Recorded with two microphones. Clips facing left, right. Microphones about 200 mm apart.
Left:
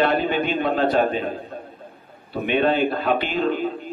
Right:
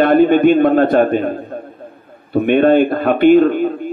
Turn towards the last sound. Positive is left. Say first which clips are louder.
# right 10 dB
turn(degrees=-55)  # may be behind; listen again after turning